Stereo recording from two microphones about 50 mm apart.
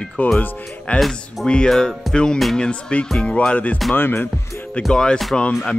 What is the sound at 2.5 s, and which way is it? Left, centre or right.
Speech, centre.